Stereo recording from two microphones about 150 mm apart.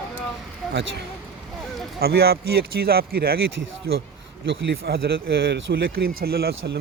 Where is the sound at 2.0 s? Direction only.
90° right.